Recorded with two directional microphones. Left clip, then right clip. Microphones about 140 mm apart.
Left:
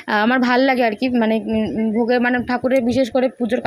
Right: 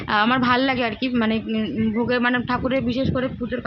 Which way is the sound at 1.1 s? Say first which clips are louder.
Left 5 dB; 20° left (ahead or behind).